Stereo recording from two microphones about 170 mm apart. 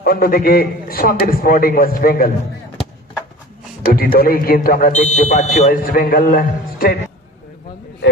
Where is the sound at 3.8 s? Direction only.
60° left (ahead or behind); by 5.7 s 40° left (ahead or behind).